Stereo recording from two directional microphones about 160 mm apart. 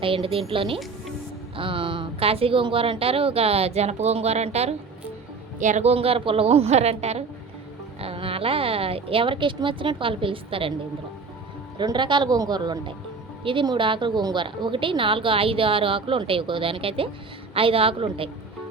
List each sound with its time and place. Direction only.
0.0 s a woman's voice: 35° right (ahead or behind)
11.8 s a man's voice: 30° right (ahead or behind)